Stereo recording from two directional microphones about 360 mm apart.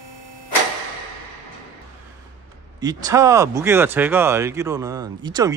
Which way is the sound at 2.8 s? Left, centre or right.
Centre.